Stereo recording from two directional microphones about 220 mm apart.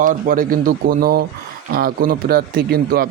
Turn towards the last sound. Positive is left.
turn(degrees=-45)  # may be behind; listen again after turning